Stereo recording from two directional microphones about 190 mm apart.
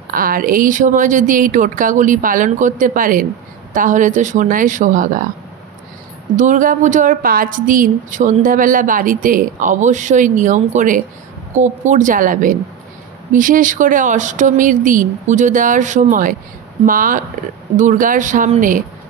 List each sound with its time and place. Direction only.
0.1 s a woman's voice: 50° right (ahead or behind)
6.3 s a woman's voice: 40° right (ahead or behind)